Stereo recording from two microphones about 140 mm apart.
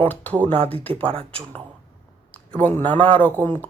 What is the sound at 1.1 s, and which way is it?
Speech, 40° right (ahead or behind).